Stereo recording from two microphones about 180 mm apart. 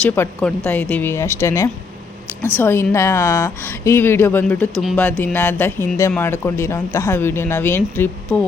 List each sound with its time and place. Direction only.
0.0 s speech: 5° left (ahead or behind)